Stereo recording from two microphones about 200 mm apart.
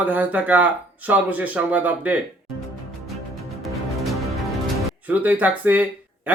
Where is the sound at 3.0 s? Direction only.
Centre (ahead or behind).